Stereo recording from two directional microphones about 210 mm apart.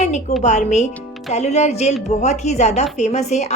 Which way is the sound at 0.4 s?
35° left (ahead or behind).